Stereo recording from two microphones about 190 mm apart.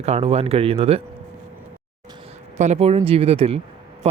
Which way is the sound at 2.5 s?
35° right (ahead or behind).